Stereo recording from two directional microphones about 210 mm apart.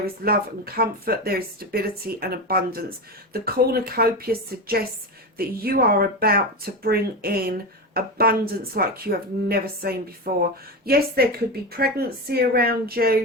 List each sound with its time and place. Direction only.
0.0 s speech: 45° right (ahead or behind)